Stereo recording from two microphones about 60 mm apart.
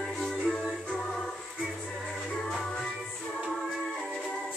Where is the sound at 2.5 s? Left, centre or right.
Centre.